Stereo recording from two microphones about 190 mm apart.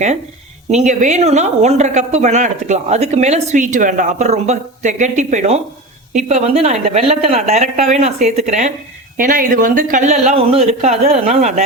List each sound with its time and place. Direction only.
0.7 s speech: 40° right (ahead or behind)